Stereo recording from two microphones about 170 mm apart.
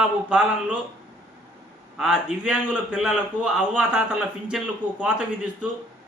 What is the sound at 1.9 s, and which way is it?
A man's voice, 5° right (ahead or behind).